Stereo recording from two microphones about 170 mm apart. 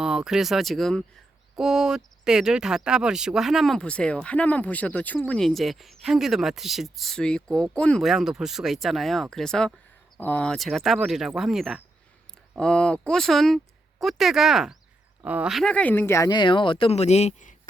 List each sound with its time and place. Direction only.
0.0 s speech: 5° right (ahead or behind); by 17.5 s 40° left (ahead or behind)